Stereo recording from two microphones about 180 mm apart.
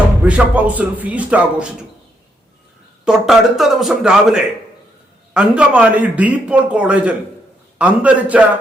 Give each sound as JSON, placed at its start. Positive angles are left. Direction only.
{"t": 0.3, "sound": "a man's voice", "side_deg": -10}
{"t": 3.0, "sound": "a man's voice", "side_deg": -5}